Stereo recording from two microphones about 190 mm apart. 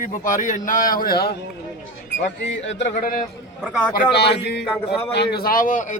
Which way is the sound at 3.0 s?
45° left (ahead or behind).